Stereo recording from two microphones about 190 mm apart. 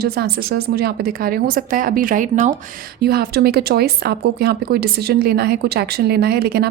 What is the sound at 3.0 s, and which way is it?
A woman's voice, 55° right (ahead or behind).